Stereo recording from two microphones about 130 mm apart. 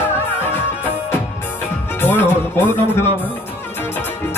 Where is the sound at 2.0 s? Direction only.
15° left (ahead or behind).